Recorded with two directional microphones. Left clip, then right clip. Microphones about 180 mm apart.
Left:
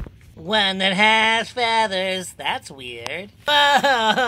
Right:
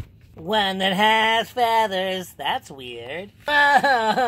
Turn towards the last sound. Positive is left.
turn(degrees=-35)  # may be behind; listen again after turning